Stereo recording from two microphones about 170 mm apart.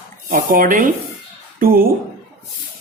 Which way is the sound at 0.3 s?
50° right (ahead or behind).